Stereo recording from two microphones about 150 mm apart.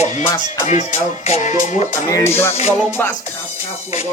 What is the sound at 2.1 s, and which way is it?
Music, 15° left (ahead or behind).